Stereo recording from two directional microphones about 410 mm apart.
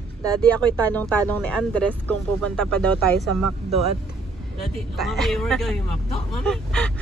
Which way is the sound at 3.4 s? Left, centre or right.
Right.